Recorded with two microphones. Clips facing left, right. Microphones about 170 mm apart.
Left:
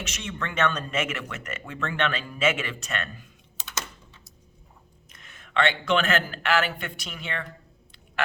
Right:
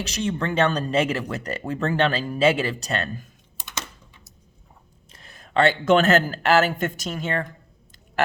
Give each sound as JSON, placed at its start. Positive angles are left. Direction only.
{"t": 0.0, "sound": "speech", "side_deg": -35}
{"t": 5.1, "sound": "speech", "side_deg": -35}